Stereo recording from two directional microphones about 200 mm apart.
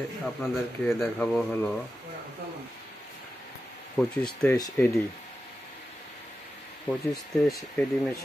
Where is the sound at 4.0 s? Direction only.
5° left (ahead or behind).